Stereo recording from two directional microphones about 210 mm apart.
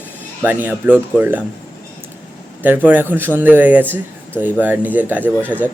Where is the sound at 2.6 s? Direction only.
10° right (ahead or behind).